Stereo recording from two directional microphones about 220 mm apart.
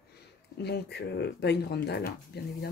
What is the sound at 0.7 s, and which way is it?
Speech, 50° left (ahead or behind).